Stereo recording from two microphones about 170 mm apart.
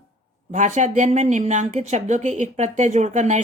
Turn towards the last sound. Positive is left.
turn(degrees=-45)  # may be behind; listen again after turning